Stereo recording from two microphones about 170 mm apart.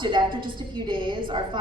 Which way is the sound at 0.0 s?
30° right (ahead or behind).